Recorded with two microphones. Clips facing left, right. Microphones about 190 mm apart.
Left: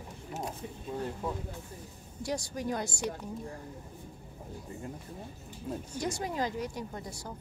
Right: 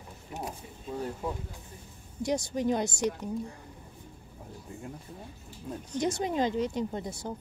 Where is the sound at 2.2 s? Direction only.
20° right (ahead or behind).